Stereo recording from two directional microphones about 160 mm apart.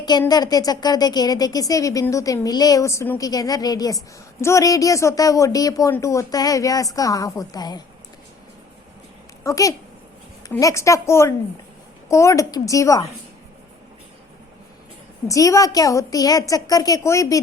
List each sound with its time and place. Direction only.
0.0 s a woman's voice: 25° left (ahead or behind)
9.4 s a woman's voice: 20° left (ahead or behind)
15.3 s a woman's voice: 20° left (ahead or behind)